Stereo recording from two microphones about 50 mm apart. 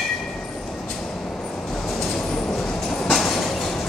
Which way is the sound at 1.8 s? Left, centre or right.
Centre.